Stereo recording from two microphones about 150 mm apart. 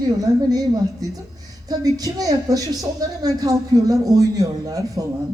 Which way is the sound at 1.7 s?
25° right (ahead or behind).